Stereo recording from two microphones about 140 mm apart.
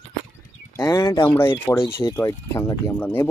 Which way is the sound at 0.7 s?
25° left (ahead or behind).